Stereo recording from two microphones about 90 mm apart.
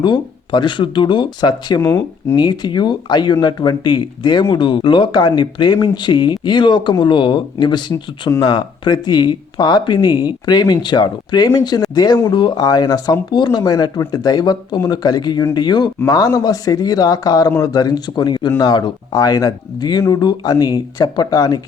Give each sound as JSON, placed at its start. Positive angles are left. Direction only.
{"t": 0.0, "sound": "speech", "side_deg": 60}